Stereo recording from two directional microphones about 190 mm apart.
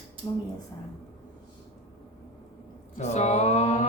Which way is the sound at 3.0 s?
35° left (ahead or behind).